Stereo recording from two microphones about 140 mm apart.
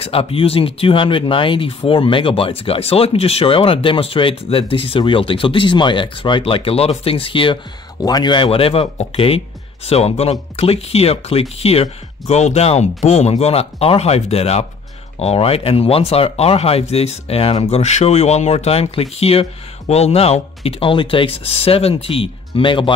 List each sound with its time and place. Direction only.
0.0 s speech: 40° left (ahead or behind)